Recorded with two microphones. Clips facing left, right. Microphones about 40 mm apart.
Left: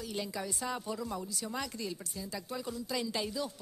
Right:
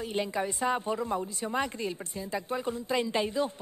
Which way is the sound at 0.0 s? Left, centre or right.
Right.